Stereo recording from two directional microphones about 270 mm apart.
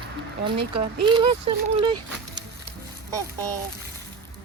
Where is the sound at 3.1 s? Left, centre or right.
Centre.